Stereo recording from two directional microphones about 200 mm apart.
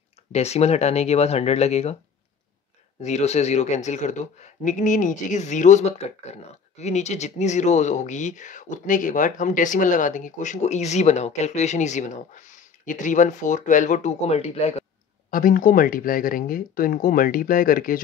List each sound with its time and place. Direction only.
0.3 s speech: 30° left (ahead or behind)
3.0 s speech: 35° left (ahead or behind)
15.3 s speech: 45° left (ahead or behind)